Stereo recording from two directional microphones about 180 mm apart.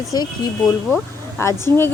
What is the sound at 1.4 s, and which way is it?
Speech, 15° left (ahead or behind).